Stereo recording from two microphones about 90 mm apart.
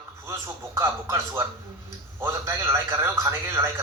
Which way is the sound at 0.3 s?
30° right (ahead or behind).